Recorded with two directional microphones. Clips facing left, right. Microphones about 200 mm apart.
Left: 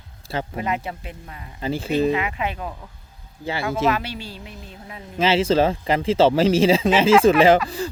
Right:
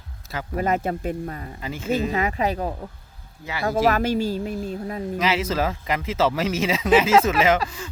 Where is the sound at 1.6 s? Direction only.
30° left (ahead or behind).